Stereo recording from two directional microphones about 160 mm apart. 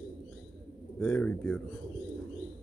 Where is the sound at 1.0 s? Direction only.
10° left (ahead or behind).